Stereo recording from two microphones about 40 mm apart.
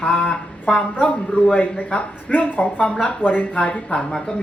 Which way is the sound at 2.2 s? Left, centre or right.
Left.